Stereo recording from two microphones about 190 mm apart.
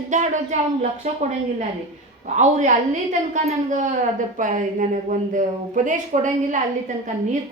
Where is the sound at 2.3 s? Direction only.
40° right (ahead or behind).